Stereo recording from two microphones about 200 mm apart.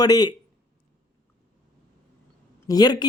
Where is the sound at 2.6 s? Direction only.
20° left (ahead or behind).